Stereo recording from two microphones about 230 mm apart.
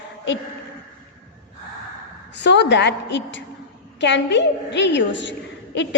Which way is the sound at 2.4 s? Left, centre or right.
Left.